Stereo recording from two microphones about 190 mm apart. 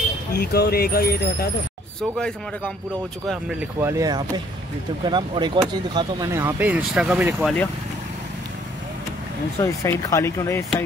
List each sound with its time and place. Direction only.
0.3 s speech: 55° left (ahead or behind)
2.0 s speech: 5° left (ahead or behind)
3.8 s speech: 15° right (ahead or behind)
9.6 s speech: 15° left (ahead or behind)